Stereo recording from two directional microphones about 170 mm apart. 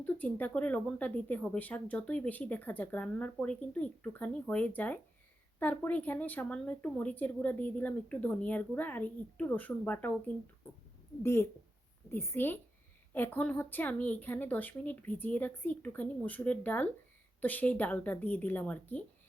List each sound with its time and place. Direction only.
0.0 s speech: 10° left (ahead or behind)
11.2 s speech: 15° left (ahead or behind)